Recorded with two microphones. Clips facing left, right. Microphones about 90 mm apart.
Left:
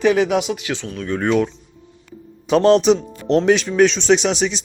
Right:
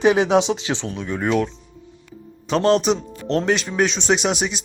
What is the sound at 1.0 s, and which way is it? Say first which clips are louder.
Speech: left 4 dB; 10° right (ahead or behind).